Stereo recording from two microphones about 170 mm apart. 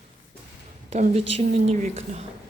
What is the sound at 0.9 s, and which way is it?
Speech, 40° right (ahead or behind).